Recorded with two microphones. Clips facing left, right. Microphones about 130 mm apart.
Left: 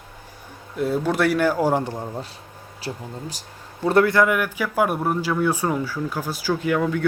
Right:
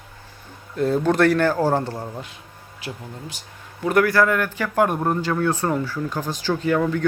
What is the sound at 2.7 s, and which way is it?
Speech, 35° left (ahead or behind).